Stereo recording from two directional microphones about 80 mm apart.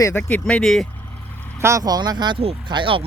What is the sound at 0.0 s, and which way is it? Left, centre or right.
Speech, left.